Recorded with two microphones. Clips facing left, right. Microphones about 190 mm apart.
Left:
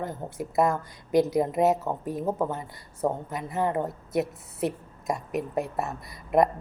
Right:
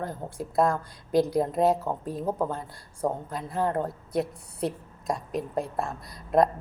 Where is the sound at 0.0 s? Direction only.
20° left (ahead or behind).